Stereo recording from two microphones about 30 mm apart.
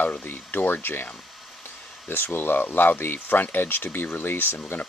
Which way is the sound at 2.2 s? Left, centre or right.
Left.